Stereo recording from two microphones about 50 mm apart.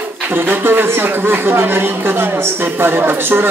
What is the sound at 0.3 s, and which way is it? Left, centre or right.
Speech, right.